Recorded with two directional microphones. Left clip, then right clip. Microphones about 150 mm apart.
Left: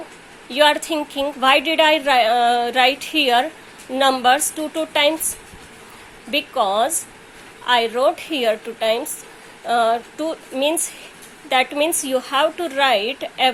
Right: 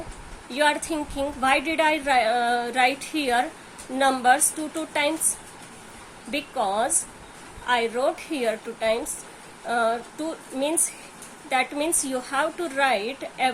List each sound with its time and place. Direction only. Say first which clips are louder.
0.5 s a woman's voice: left 7 dB; 25° left (ahead or behind)
6.3 s a woman's voice: left 6 dB; 25° left (ahead or behind)